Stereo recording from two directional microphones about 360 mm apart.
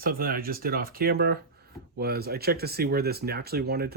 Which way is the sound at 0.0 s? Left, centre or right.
Right.